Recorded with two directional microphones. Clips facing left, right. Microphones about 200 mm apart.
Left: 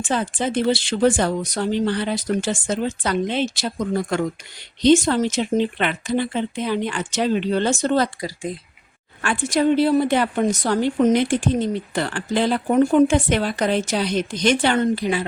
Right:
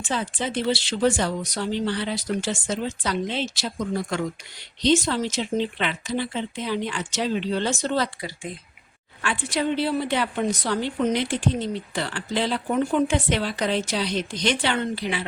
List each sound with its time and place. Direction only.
0.0 s a woman's voice: 50° left (ahead or behind)